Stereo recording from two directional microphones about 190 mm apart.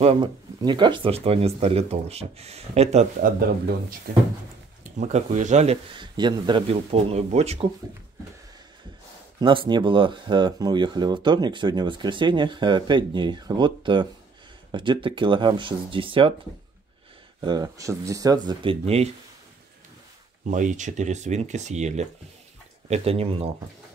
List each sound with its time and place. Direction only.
0.0 s speech: 30° right (ahead or behind)
3.2 s speech: 50° right (ahead or behind)
5.0 s speech: 40° right (ahead or behind)
5.9 s speech: 25° right (ahead or behind)
9.4 s speech: 25° right (ahead or behind)
17.4 s speech: 20° right (ahead or behind)
20.4 s speech: 40° right (ahead or behind)